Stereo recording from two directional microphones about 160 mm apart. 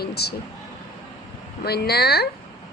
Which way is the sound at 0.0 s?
90° left.